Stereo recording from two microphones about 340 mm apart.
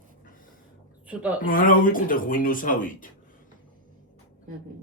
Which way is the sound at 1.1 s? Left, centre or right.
Centre.